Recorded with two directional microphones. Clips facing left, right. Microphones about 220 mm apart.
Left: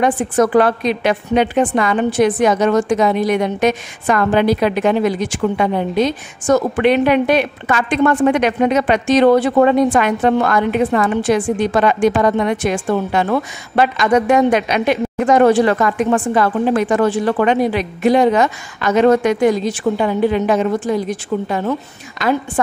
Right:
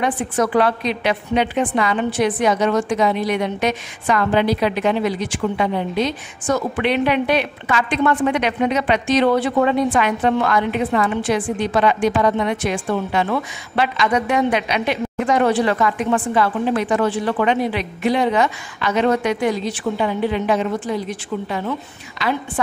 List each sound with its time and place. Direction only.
0.0 s a woman's voice: 45° left (ahead or behind)